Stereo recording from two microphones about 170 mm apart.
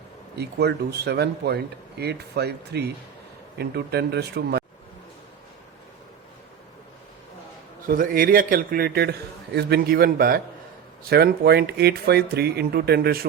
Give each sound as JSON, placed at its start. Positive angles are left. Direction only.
{"t": 0.3, "sound": "speech", "side_deg": -75}
{"t": 7.9, "sound": "a man's voice", "side_deg": -55}